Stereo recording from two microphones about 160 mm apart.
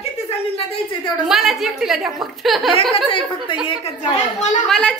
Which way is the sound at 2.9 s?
35° left (ahead or behind).